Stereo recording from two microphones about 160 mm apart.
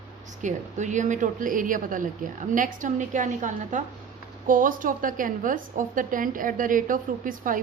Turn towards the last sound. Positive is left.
turn(degrees=-55)  # may be behind; listen again after turning